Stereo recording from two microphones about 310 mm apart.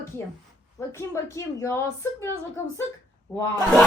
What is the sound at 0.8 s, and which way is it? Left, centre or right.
A woman's voice, centre.